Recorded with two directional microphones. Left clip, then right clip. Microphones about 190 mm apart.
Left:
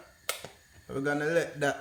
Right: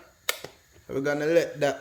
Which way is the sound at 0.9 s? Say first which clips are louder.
Right 5 dB; 20° right (ahead or behind).